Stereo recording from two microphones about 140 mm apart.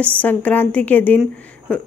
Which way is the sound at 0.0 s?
10° left (ahead or behind).